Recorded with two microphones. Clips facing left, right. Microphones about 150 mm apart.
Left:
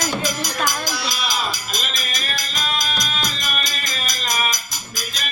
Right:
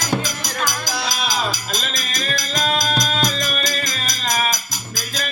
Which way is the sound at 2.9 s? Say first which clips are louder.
Right 6 dB; 45° right (ahead or behind).